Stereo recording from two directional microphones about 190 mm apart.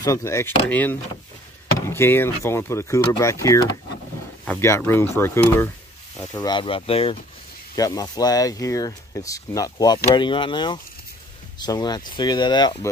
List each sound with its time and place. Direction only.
0.0 s speech: 15° left (ahead or behind)
7.7 s speech: 20° left (ahead or behind)